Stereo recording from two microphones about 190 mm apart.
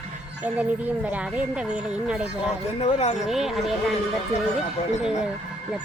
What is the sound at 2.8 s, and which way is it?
Speech, 35° left (ahead or behind).